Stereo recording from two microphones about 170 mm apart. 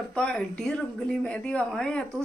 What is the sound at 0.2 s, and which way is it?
A woman's voice, 5° left (ahead or behind).